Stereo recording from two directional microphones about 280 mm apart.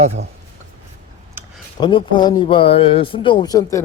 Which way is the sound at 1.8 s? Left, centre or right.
Centre.